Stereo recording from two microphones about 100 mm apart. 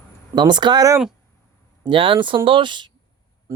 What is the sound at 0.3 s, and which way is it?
Speech, 45° right (ahead or behind).